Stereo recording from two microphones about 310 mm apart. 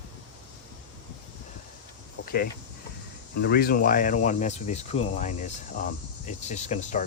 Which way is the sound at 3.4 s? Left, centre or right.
Left.